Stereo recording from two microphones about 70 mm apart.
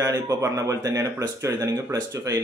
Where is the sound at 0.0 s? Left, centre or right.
Right.